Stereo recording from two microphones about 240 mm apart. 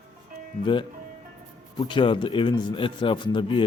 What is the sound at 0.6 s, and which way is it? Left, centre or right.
Speech, left.